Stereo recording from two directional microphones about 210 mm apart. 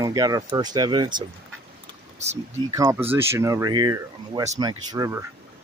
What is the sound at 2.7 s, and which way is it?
Speech, 15° right (ahead or behind).